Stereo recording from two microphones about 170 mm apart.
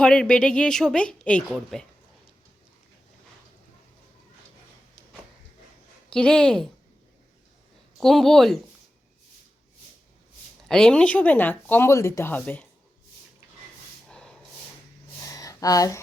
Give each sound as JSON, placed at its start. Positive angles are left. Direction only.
{"t": 0.0, "sound": "a woman's voice", "side_deg": 5}
{"t": 6.1, "sound": "a woman's voice", "side_deg": 5}
{"t": 7.9, "sound": "a woman's voice", "side_deg": 0}
{"t": 10.7, "sound": "speech", "side_deg": 5}
{"t": 14.1, "sound": "snort", "side_deg": 5}
{"t": 15.3, "sound": "a sound", "side_deg": 20}